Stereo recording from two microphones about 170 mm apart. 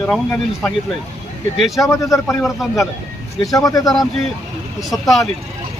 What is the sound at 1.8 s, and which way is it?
Speech, 20° left (ahead or behind).